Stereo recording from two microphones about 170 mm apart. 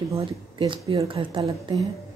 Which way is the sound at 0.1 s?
30° right (ahead or behind).